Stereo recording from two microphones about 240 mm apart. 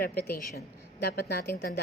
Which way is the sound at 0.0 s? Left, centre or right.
Left.